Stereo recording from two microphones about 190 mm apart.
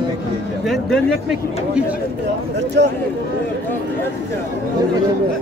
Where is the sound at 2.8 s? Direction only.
60° right (ahead or behind).